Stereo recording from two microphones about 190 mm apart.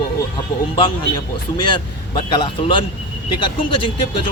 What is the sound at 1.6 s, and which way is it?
Speech, 25° left (ahead or behind).